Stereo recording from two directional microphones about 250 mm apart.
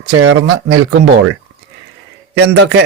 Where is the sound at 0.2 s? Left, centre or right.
Right.